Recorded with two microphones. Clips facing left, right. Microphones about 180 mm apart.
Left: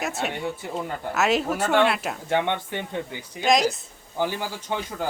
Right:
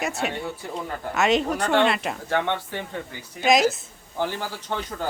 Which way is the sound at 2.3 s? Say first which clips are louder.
Left 1 dB; 20° left (ahead or behind).